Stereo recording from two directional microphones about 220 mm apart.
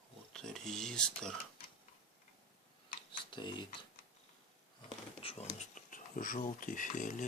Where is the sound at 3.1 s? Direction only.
20° left (ahead or behind).